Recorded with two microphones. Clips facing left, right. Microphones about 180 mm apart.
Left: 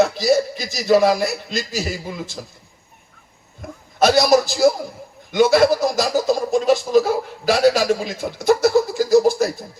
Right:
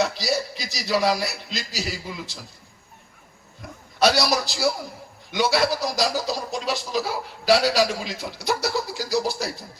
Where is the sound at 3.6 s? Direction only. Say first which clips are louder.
Left 6 dB; 50° left (ahead or behind).